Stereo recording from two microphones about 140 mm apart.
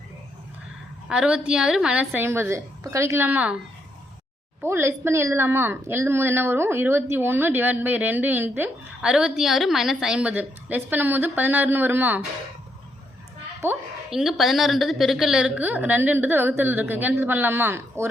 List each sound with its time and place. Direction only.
1.0 s a woman's voice: 5° right (ahead or behind)
4.6 s a woman's voice: 15° right (ahead or behind)
13.6 s a woman's voice: 15° right (ahead or behind)
14.1 s a woman's voice: 5° right (ahead or behind); by 18.1 s 20° right (ahead or behind)